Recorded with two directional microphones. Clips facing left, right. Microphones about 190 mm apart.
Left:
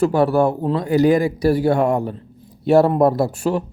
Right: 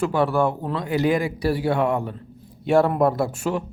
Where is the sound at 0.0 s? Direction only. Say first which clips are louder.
Left 5 dB; 40° left (ahead or behind).